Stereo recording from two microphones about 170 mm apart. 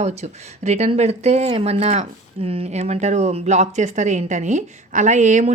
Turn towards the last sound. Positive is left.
turn(degrees=-45)  # may be behind; listen again after turning